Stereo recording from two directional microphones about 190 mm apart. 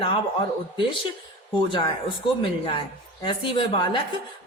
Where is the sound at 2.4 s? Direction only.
25° left (ahead or behind).